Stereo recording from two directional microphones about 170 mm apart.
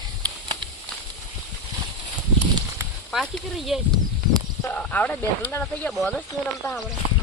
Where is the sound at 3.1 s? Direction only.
Centre (ahead or behind).